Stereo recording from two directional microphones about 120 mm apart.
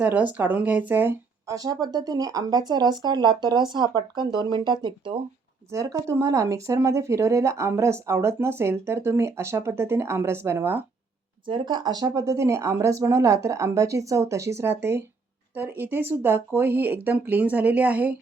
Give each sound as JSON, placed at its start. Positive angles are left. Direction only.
{"t": 0.0, "sound": "speech", "side_deg": -15}
{"t": 1.5, "sound": "speech", "side_deg": -30}
{"t": 5.7, "sound": "speech", "side_deg": -25}
{"t": 11.4, "sound": "speech", "side_deg": -40}